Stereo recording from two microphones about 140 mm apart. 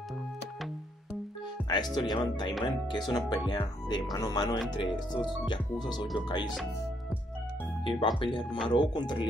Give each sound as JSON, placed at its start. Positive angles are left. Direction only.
{"t": 1.6, "sound": "music", "side_deg": -10}
{"t": 2.0, "sound": "speech", "side_deg": 30}
{"t": 7.8, "sound": "speech", "side_deg": 35}